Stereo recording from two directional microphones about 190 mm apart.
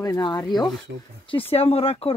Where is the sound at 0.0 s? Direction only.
20° left (ahead or behind).